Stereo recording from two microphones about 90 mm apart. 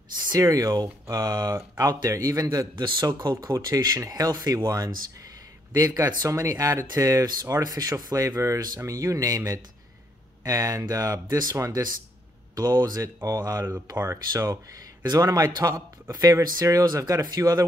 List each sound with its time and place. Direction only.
0.4 s speech: 35° right (ahead or behind)
13.0 s speech: 35° right (ahead or behind)